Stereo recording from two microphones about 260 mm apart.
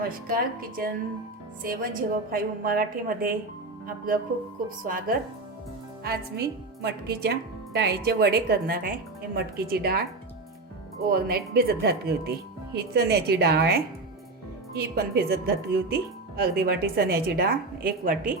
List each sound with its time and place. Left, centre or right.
0.3 s a woman's voice: right
11.0 s speech: right